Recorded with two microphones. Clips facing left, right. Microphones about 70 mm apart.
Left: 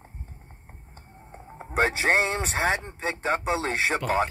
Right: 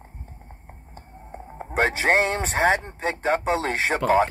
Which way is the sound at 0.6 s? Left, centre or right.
Right.